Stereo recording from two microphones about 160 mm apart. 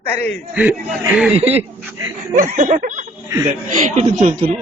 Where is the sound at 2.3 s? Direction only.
50° right (ahead or behind).